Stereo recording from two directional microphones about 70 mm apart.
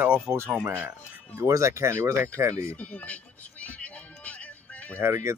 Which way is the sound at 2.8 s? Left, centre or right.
Left.